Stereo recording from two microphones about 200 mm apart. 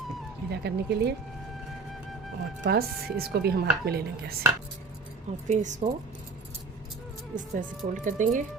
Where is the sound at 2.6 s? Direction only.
50° right (ahead or behind).